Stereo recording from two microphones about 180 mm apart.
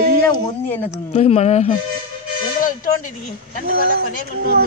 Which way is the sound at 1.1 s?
35° left (ahead or behind).